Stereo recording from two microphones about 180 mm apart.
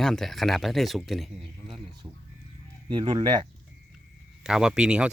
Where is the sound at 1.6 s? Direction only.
30° right (ahead or behind).